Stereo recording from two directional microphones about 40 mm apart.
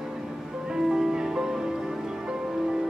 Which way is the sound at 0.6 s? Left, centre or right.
Centre.